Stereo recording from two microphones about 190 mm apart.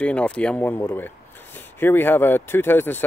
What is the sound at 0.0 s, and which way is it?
Speech, 5° left (ahead or behind).